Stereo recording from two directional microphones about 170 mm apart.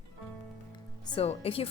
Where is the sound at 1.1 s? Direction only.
35° left (ahead or behind).